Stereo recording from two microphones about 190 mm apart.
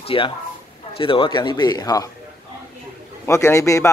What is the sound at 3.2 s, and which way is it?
Speech, 15° left (ahead or behind).